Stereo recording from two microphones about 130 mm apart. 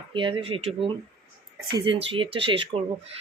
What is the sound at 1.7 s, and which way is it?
A woman's voice, 40° right (ahead or behind).